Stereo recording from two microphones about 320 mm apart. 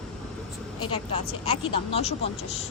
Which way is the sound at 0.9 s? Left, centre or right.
Centre.